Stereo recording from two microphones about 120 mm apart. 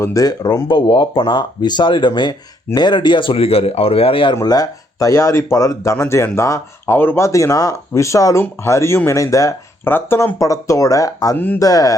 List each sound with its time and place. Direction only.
0.0 s speech: 30° left (ahead or behind); by 4.4 s 45° left (ahead or behind)
4.4 s speech: 30° left (ahead or behind)
11.3 s speech: 15° left (ahead or behind)
11.6 s speech: 30° left (ahead or behind)